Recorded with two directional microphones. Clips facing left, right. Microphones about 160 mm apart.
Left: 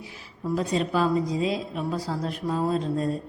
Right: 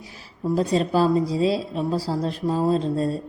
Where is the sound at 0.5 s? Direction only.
35° right (ahead or behind).